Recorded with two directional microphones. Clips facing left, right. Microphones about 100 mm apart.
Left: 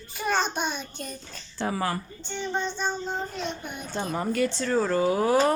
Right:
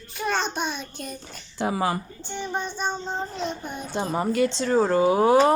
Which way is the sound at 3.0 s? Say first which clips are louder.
Right 2 dB; 30° right (ahead or behind).